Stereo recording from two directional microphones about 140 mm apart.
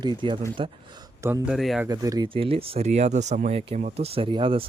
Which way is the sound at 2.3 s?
40° right (ahead or behind).